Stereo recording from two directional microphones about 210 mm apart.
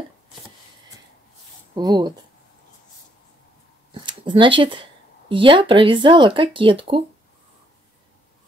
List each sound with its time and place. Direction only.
1.8 s speech: 20° right (ahead or behind)
3.9 s a sound: 20° right (ahead or behind)
5.3 s speech: 25° right (ahead or behind)